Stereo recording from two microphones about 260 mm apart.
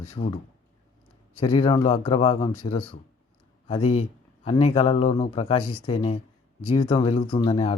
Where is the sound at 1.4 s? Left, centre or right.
Left.